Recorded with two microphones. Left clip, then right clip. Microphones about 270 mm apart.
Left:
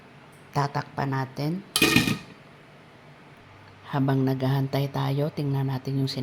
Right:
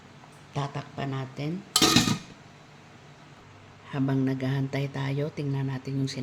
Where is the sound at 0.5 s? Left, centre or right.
Centre.